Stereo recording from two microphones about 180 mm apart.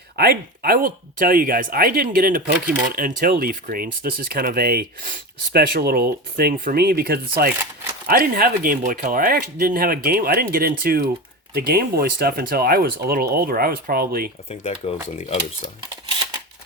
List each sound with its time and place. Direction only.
0.2 s speech: 55° right (ahead or behind)
14.5 s speech: 35° left (ahead or behind)